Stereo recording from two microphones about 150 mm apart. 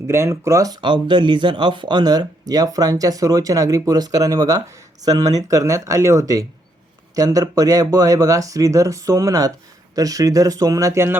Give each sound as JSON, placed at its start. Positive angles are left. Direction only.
{"t": 0.1, "sound": "speech", "side_deg": -20}